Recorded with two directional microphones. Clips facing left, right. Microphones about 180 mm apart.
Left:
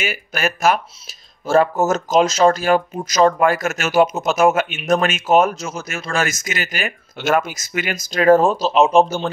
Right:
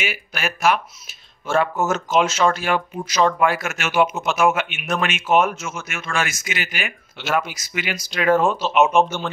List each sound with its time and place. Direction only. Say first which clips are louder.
0.0 s speech: left 4 dB; 45° left (ahead or behind)